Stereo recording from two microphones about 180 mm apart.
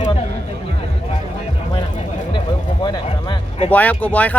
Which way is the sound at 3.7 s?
10° left (ahead or behind).